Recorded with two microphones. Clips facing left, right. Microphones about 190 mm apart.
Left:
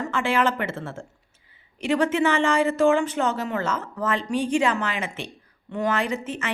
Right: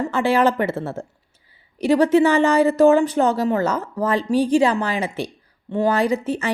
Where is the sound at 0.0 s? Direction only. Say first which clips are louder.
Right 5 dB; 35° right (ahead or behind).